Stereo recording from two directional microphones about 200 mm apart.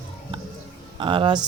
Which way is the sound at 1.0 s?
25° right (ahead or behind).